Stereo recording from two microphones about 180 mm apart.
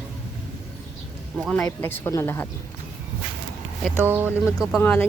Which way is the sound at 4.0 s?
10° right (ahead or behind).